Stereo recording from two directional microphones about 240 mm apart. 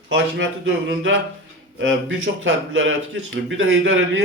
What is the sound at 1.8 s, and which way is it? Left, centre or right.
A man's voice, right.